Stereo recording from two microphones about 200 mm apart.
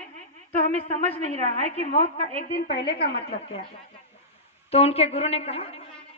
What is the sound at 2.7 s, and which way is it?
Speech, 55° left (ahead or behind).